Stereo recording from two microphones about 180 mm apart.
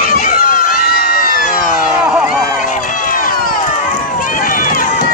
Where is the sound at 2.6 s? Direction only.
45° left (ahead or behind).